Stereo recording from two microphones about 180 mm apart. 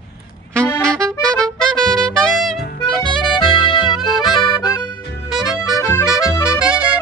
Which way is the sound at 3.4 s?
25° left (ahead or behind).